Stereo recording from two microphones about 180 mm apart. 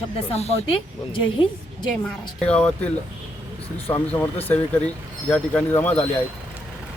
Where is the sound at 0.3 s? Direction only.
35° left (ahead or behind).